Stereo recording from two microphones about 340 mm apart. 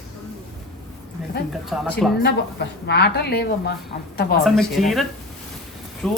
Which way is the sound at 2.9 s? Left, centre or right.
Left.